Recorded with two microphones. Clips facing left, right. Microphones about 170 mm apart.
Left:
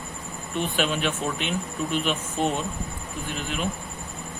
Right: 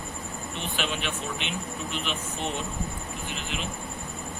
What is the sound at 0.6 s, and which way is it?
Speech, 45° left (ahead or behind).